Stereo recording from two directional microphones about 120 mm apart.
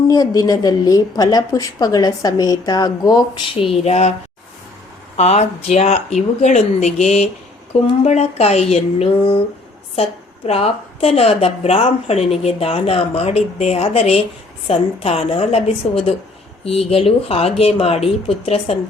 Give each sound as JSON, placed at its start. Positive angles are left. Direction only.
{"t": 0.1, "sound": "a woman's voice", "side_deg": 30}
{"t": 3.6, "sound": "a woman's voice", "side_deg": 55}
{"t": 5.1, "sound": "a woman's voice", "side_deg": 65}